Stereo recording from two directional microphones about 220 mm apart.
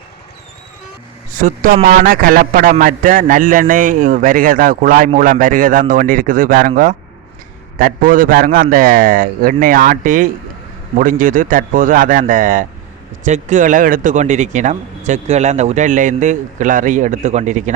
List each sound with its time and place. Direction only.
1.3 s a man's voice: 35° right (ahead or behind)